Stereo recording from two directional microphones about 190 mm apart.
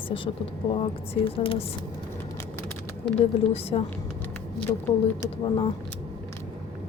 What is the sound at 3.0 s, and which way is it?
Speech, 30° left (ahead or behind).